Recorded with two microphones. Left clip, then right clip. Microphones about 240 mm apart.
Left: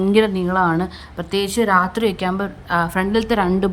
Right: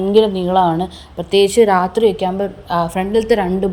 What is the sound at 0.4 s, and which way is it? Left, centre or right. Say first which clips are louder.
A woman's voice: right 4 dB; centre.